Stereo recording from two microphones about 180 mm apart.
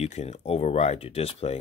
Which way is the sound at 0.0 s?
35° left (ahead or behind).